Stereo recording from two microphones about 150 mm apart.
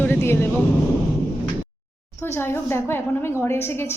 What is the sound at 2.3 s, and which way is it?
Speech, 15° left (ahead or behind).